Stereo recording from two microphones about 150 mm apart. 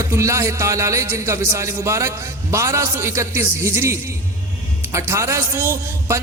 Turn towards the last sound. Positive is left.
turn(degrees=-15)  # may be behind; listen again after turning